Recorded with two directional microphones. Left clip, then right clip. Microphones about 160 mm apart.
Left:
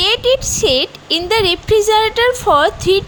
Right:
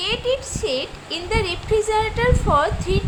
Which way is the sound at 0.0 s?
55° left (ahead or behind).